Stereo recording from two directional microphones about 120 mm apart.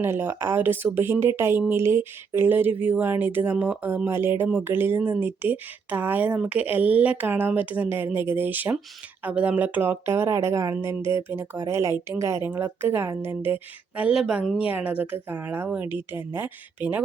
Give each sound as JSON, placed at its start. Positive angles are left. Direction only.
{"t": 0.0, "sound": "speech", "side_deg": -20}